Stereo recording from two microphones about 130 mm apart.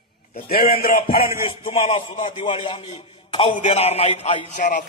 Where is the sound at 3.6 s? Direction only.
60° left (ahead or behind).